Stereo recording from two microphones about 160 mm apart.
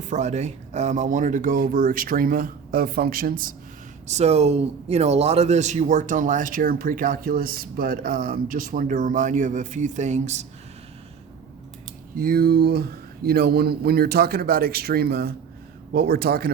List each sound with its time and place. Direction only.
0.0 s speech: 45° right (ahead or behind)
4.0 s speech: 45° right (ahead or behind)
12.1 s speech: 65° right (ahead or behind)